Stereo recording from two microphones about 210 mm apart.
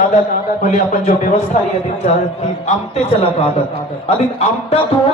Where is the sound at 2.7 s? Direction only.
30° left (ahead or behind).